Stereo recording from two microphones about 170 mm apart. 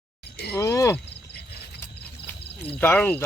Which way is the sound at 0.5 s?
20° left (ahead or behind).